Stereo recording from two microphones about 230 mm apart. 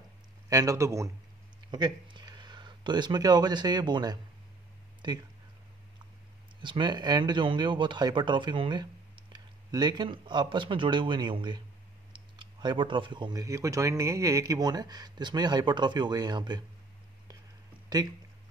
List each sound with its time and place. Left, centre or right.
0.5 s speech: centre
6.6 s speech: centre